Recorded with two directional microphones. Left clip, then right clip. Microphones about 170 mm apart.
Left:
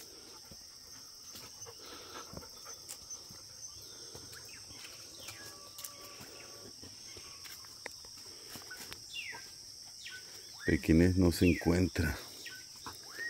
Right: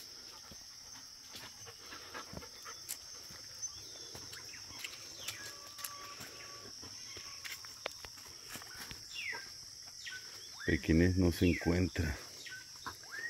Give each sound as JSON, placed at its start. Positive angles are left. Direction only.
{"t": 10.6, "sound": "speech", "side_deg": 25}